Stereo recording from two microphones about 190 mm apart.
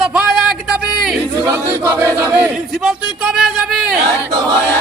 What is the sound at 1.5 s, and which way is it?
Chant, 10° right (ahead or behind).